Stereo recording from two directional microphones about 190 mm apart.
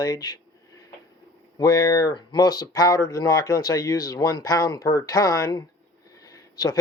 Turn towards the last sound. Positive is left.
turn(degrees=20)  # may be behind; listen again after turning